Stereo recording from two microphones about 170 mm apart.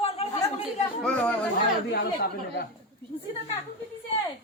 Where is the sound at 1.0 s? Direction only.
5° left (ahead or behind).